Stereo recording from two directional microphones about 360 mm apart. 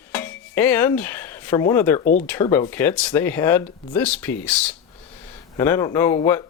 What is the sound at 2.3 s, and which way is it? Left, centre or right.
Speech, centre.